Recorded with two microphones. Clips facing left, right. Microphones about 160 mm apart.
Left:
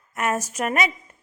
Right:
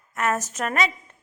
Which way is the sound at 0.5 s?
10° left (ahead or behind).